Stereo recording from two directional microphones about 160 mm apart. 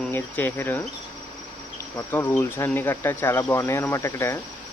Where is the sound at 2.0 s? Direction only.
10° left (ahead or behind).